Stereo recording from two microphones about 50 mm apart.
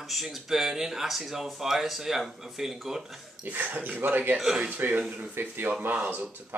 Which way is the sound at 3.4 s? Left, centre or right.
Right.